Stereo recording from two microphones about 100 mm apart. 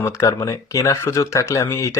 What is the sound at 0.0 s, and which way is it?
Speech, 30° left (ahead or behind).